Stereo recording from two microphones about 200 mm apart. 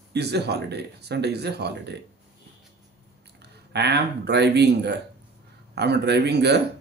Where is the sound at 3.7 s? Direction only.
55° right (ahead or behind).